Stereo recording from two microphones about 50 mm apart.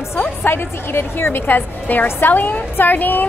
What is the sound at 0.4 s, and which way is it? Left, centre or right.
A woman's voice, left.